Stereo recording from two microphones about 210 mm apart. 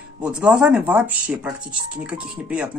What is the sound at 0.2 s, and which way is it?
Speech, 5° right (ahead or behind).